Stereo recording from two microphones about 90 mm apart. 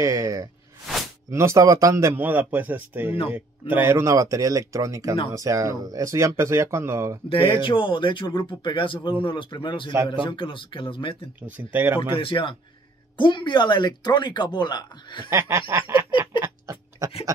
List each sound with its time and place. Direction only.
0.0 s speech: 40° right (ahead or behind)
7.2 s speech: 80° left
11.4 s speech: 20° right (ahead or behind)
12.0 s speech: 80° left
13.2 s speech: 60° left (ahead or behind)
15.2 s speech: 30° right (ahead or behind)
16.7 s a sound: 35° right (ahead or behind)